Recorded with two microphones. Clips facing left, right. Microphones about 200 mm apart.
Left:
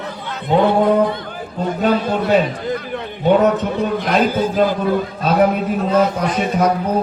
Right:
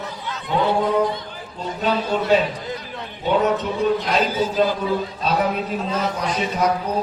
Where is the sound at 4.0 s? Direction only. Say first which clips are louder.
Left 4 dB; 55° left (ahead or behind).